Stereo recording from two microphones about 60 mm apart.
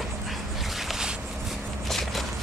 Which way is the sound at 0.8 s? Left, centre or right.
Centre.